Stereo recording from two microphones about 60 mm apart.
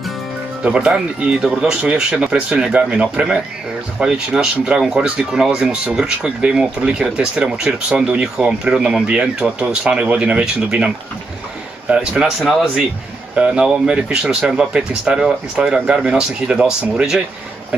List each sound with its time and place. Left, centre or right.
0.7 s speech: centre
11.9 s speech: centre
13.4 s speech: centre